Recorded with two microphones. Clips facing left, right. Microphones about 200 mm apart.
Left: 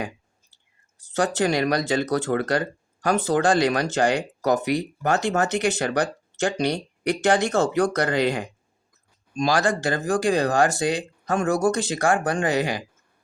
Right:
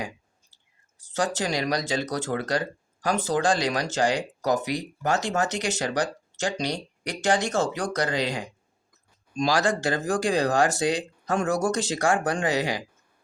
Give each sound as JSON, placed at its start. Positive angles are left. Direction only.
{"t": 1.0, "sound": "speech", "side_deg": 60}